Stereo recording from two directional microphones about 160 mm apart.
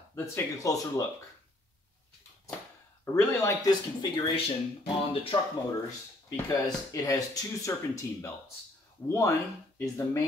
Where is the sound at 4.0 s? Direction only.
30° left (ahead or behind).